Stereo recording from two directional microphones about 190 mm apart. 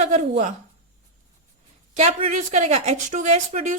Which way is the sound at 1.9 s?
35° right (ahead or behind).